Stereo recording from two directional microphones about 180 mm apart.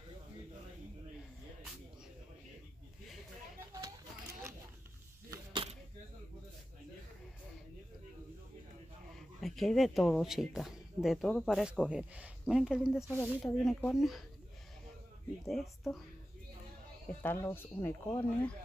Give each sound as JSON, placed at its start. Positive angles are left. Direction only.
{"t": 5.3, "sound": "a sound", "side_deg": -25}
{"t": 9.1, "sound": "speech", "side_deg": 0}
{"t": 15.4, "sound": "speech", "side_deg": 0}
{"t": 17.1, "sound": "speech", "side_deg": 10}